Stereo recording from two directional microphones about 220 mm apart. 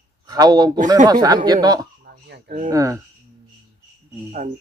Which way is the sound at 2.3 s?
40° right (ahead or behind).